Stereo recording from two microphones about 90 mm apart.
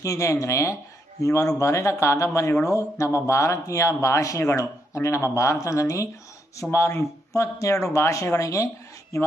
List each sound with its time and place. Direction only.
0.0 s speech: 35° left (ahead or behind)